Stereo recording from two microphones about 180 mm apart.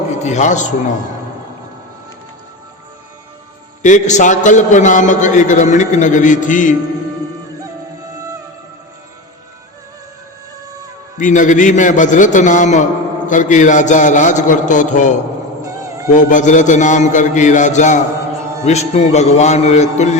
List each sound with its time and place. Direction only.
0.1 s a man's voice: 40° left (ahead or behind)
3.8 s a man's voice: 45° left (ahead or behind)
11.2 s a man's voice: 45° left (ahead or behind)
15.6 s cat: 20° right (ahead or behind)
16.1 s a man's voice: 45° left (ahead or behind)